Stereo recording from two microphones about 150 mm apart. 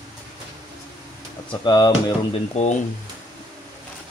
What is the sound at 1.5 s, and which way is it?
Speech, 30° left (ahead or behind).